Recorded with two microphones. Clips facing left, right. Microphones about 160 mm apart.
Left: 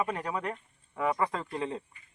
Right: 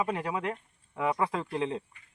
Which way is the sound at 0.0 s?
10° right (ahead or behind).